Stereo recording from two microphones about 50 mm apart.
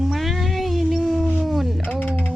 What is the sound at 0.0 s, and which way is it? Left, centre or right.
Cat, centre.